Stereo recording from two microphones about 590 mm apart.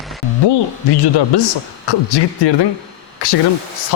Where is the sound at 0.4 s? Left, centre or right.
Left.